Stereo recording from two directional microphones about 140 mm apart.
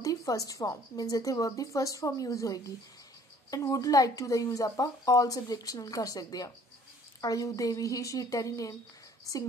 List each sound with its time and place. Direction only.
0.0 s speech: 25° left (ahead or behind)